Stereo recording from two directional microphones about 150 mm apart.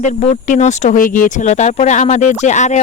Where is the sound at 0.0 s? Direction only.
50° left (ahead or behind).